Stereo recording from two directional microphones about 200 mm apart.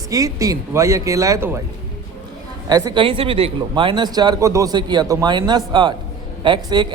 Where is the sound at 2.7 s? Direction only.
20° right (ahead or behind).